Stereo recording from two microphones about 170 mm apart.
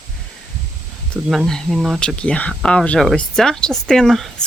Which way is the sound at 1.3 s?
Centre (ahead or behind).